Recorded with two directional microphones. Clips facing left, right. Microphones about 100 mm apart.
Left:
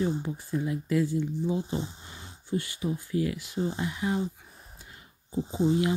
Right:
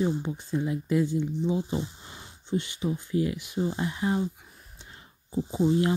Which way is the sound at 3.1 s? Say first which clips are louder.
Right 2 dB; 20° right (ahead or behind).